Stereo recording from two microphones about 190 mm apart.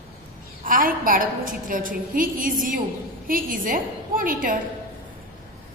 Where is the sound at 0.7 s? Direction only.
45° right (ahead or behind).